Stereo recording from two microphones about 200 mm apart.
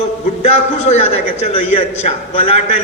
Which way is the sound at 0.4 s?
35° left (ahead or behind).